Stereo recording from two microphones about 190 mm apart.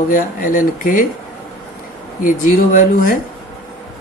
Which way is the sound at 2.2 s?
45° left (ahead or behind).